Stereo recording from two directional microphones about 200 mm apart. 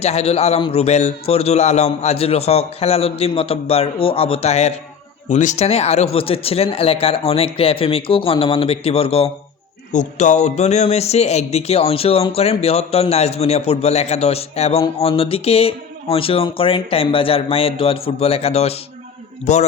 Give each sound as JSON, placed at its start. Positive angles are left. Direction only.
{"t": 0.0, "sound": "speech", "side_deg": 30}